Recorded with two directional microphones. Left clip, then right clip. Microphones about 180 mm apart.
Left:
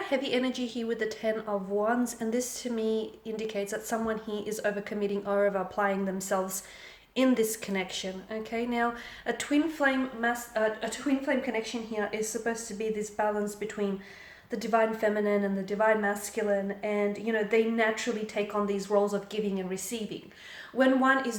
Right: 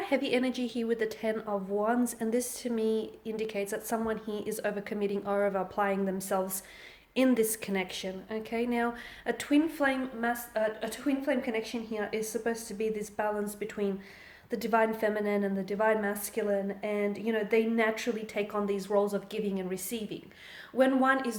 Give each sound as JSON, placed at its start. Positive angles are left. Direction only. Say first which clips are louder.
{"t": 0.0, "sound": "a woman's voice", "louder": "even", "side_deg": -35}